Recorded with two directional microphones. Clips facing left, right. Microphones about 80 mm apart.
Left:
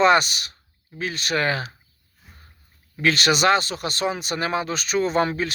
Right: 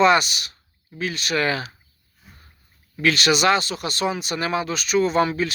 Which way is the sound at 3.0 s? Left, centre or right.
Left.